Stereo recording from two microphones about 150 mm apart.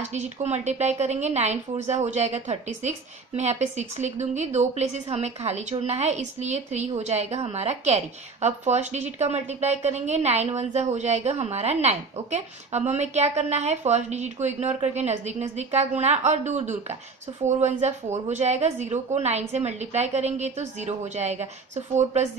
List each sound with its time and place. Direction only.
0.0 s a woman's voice: 50° right (ahead or behind)